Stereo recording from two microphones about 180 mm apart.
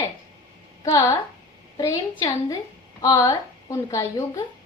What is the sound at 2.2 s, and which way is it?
A woman's voice, 20° left (ahead or behind).